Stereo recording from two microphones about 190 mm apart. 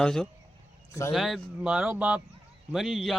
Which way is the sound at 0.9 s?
15° left (ahead or behind).